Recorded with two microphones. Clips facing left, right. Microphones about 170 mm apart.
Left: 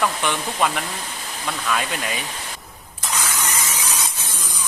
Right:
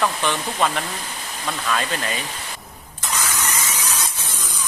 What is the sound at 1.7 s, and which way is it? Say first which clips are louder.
Speech: right 1 dB; 10° left (ahead or behind).